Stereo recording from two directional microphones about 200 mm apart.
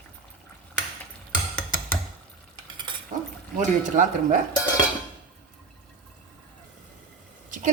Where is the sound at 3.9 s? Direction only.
40° right (ahead or behind).